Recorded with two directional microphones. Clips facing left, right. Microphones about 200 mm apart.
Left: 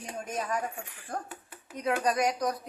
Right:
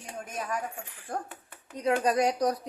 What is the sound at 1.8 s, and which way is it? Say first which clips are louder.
Speech: right 2 dB; 25° right (ahead or behind).